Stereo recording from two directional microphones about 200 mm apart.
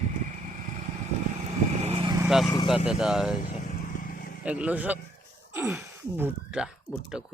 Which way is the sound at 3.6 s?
45° left (ahead or behind).